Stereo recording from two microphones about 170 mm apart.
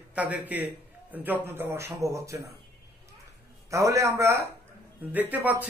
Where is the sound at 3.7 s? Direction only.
20° right (ahead or behind).